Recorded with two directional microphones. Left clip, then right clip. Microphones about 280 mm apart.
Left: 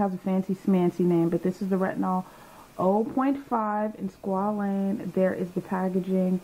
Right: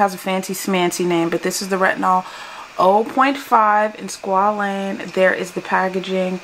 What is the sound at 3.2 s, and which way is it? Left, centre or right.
A woman's voice, centre.